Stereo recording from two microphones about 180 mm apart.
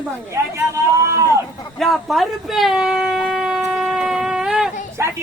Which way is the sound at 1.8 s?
Centre (ahead or behind).